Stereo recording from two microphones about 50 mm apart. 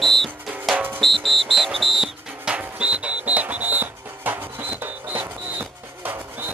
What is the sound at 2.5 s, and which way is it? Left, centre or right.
Music, centre.